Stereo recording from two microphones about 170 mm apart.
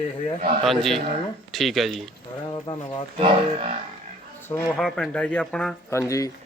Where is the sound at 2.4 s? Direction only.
25° left (ahead or behind).